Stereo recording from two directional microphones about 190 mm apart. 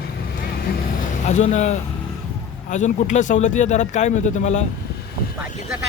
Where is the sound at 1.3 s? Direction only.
35° left (ahead or behind).